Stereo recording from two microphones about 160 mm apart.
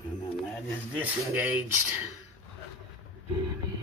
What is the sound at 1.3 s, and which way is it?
Speech, 10° right (ahead or behind).